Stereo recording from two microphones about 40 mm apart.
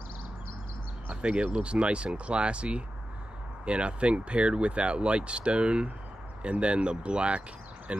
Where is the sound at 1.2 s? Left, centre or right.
Right.